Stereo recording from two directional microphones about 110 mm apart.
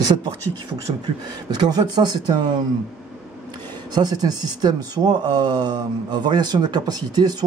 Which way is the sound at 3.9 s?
40° right (ahead or behind).